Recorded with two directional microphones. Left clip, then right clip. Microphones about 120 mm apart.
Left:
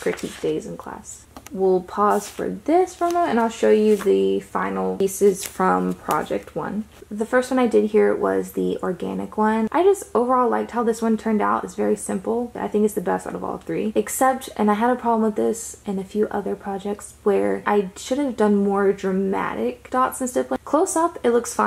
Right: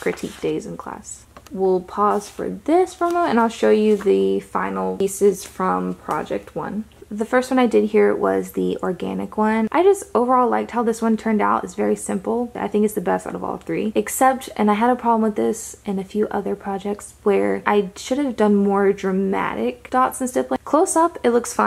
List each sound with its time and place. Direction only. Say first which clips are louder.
0.1 s speech: even; centre (ahead or behind)
1.6 s speech: even; centre (ahead or behind)
2.6 s speech: right 1 dB; 10° right (ahead or behind)
3.3 s speech: right 3 dB; 25° right (ahead or behind)
4.9 s speech: even; centre (ahead or behind)
5.6 s speech: left 2 dB; 15° left (ahead or behind)
6.2 s speech: even; centre (ahead or behind)
7.2 s speech: right 2 dB; 30° right (ahead or behind)